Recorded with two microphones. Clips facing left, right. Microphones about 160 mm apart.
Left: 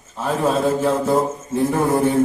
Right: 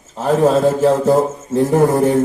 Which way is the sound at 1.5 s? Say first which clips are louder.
Right 5 dB; 40° right (ahead or behind).